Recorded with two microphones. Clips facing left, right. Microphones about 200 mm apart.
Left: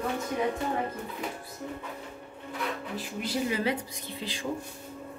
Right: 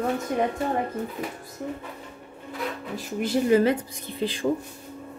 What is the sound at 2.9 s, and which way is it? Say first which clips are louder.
A woman's voice: right 9 dB; 45° right (ahead or behind).